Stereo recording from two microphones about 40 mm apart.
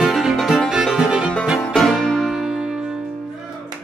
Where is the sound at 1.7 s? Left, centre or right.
Centre.